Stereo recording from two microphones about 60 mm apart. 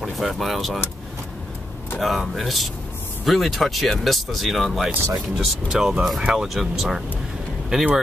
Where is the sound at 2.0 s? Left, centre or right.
Centre.